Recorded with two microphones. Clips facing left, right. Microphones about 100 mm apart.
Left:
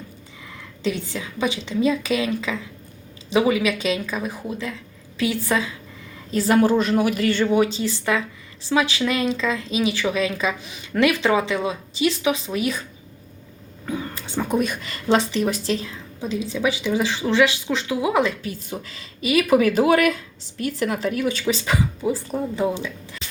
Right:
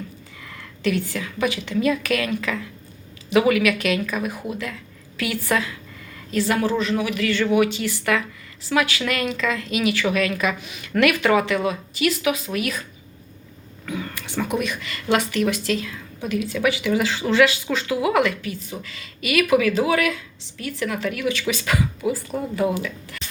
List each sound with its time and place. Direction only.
0.8 s a woman's voice: 20° left (ahead or behind)
4.5 s a sound: 20° left (ahead or behind)
5.5 s speech: 15° left (ahead or behind)
6.3 s a woman's voice: 35° left (ahead or behind)
13.8 s a sound: 30° left (ahead or behind)
14.6 s a woman's voice: 40° left (ahead or behind)
15.1 s a woman's voice: 25° left (ahead or behind)
18.4 s a woman's voice: 40° left (ahead or behind)
21.4 s a woman's voice: 25° left (ahead or behind)